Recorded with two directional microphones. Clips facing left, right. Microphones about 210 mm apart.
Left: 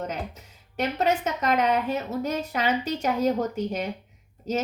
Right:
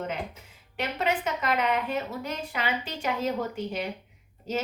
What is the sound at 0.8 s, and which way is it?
A woman's voice, 40° left (ahead or behind).